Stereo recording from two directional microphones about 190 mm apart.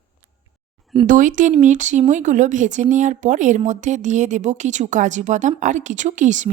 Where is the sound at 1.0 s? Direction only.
45° right (ahead or behind).